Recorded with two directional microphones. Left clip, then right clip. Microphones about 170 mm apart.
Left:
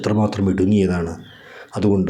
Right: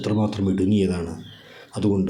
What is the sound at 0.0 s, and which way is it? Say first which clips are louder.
Speech: left 4 dB; 30° left (ahead or behind).